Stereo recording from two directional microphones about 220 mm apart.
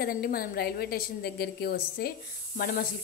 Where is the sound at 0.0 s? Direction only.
45° left (ahead or behind).